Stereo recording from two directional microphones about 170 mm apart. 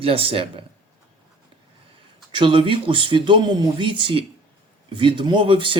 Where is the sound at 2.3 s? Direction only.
30° right (ahead or behind).